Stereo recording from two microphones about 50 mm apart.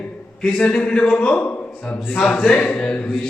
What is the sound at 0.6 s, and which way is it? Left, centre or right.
A man's voice, left.